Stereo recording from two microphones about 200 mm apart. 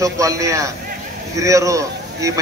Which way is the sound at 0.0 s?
15° right (ahead or behind).